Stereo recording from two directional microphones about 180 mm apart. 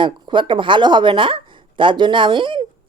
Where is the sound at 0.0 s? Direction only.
25° right (ahead or behind).